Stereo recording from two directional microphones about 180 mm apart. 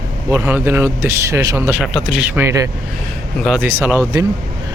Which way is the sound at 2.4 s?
15° right (ahead or behind).